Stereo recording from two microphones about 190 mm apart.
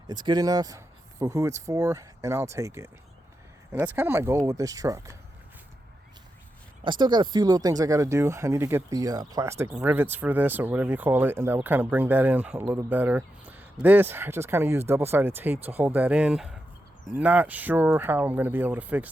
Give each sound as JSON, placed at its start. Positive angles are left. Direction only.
{"t": 0.1, "sound": "speech", "side_deg": -20}
{"t": 6.8, "sound": "speech", "side_deg": -25}